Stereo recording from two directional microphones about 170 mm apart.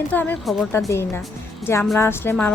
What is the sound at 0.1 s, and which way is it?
Speech, 10° left (ahead or behind).